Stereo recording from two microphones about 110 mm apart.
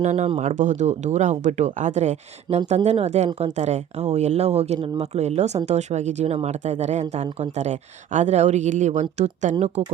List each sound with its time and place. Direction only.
0.0 s speech: 90° right
3.3 s speech: 80° right